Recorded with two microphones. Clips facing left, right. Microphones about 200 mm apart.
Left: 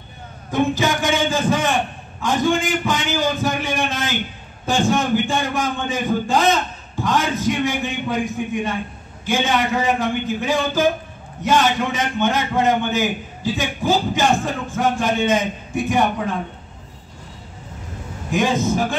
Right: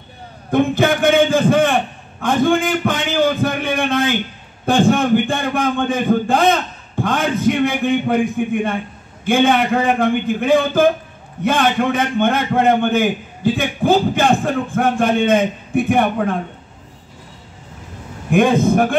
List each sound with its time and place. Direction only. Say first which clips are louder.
0.5 s a man's voice: right 4 dB; 55° right (ahead or behind)
18.3 s a man's voice: right 6 dB; 55° right (ahead or behind)